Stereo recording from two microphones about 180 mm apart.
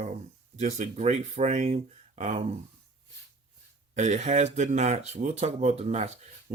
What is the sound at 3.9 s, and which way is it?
Speech, 40° right (ahead or behind).